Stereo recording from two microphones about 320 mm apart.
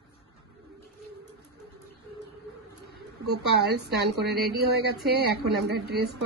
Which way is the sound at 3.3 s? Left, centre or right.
Right.